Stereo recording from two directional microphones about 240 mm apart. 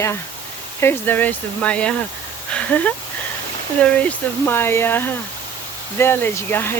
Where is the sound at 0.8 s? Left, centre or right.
Centre.